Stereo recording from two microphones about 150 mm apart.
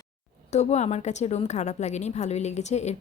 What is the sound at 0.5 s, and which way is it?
A woman's voice, 50° left (ahead or behind).